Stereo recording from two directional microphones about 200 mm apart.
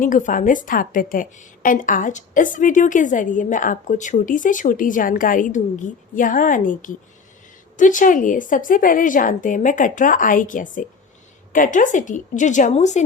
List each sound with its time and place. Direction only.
0.0 s a woman's voice: 40° left (ahead or behind)